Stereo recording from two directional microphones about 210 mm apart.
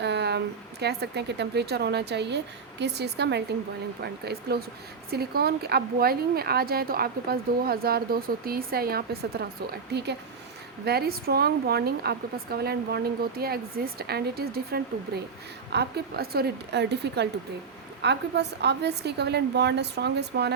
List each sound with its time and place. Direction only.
0.0 s speech: 55° right (ahead or behind)
10.8 s speech: 50° right (ahead or behind)